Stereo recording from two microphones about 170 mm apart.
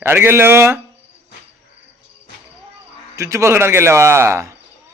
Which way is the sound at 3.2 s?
15° right (ahead or behind).